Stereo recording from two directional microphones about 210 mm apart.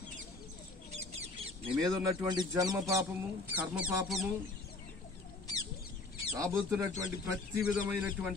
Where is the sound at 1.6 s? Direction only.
20° right (ahead or behind); by 4.3 s 5° right (ahead or behind).